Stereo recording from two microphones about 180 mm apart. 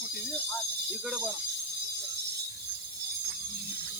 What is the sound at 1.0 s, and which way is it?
Speech, centre (ahead or behind).